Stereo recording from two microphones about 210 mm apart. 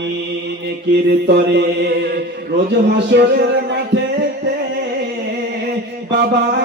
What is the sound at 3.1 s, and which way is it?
Music, 55° right (ahead or behind).